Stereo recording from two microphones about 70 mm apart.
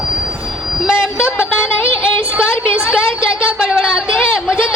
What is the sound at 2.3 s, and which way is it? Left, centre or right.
Speech, centre.